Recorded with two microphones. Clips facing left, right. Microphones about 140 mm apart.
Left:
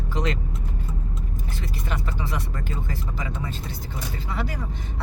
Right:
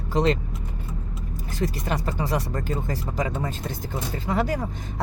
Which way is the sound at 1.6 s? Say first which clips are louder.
Right 7 dB; 40° right (ahead or behind).